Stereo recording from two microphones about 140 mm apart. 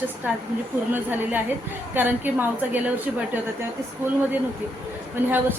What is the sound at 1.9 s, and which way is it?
Speech, 15° right (ahead or behind).